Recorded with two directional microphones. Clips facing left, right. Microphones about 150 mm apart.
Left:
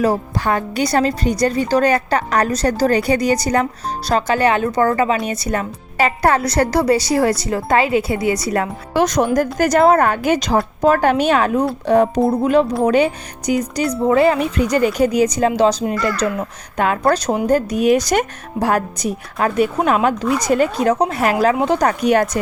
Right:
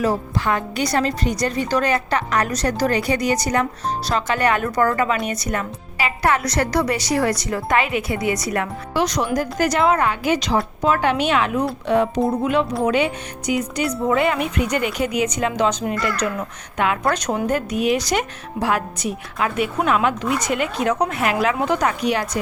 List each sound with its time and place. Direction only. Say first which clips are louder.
0.0 s speech: left 3 dB; 35° left (ahead or behind)
8.9 s speech: left 5 dB; 50° left (ahead or behind)